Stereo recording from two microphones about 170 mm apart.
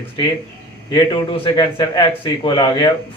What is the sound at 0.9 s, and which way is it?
Speech, 25° left (ahead or behind).